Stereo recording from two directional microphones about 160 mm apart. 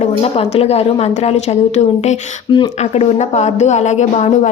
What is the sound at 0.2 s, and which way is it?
A woman's voice, 35° left (ahead or behind).